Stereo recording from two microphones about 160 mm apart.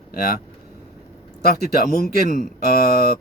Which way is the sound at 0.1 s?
70° left (ahead or behind).